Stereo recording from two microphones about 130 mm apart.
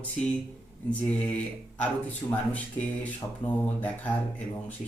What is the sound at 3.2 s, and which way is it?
Speech, 20° left (ahead or behind).